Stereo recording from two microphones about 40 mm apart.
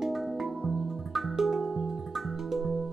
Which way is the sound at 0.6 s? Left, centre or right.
Centre.